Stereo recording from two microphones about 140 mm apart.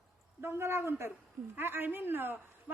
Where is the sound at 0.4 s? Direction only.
15° right (ahead or behind).